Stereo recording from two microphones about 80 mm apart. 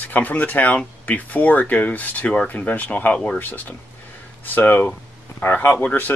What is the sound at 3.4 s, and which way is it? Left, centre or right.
Speech, left.